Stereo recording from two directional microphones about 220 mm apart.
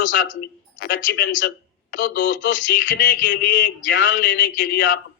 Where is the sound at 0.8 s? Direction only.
50° left (ahead or behind).